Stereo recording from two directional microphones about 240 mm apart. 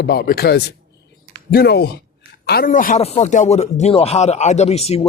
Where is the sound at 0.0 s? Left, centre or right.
Left.